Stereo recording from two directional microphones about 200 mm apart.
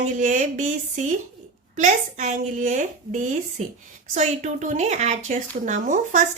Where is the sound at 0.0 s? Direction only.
40° right (ahead or behind).